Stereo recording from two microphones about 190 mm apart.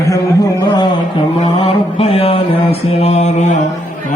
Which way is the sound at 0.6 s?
20° left (ahead or behind).